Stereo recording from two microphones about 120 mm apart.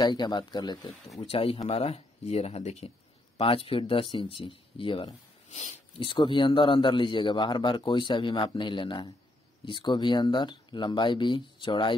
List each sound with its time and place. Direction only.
0.0 s a man's voice: 35° left (ahead or behind)
1.2 s speech: 50° left (ahead or behind)
3.3 s speech: 50° left (ahead or behind)
5.5 s speech: 70° left (ahead or behind)
5.9 s a man's voice: 45° left (ahead or behind)